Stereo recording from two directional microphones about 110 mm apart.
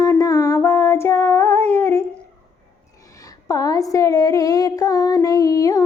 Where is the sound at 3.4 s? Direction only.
30° left (ahead or behind).